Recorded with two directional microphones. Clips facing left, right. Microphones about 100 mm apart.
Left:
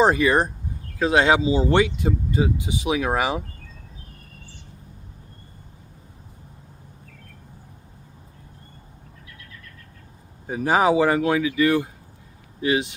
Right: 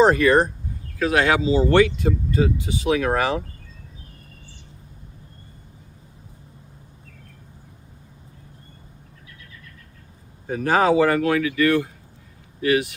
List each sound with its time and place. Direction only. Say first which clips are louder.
0.0 s speech: right 2 dB; 15° left (ahead or behind)
10.4 s speech: even; 15° left (ahead or behind)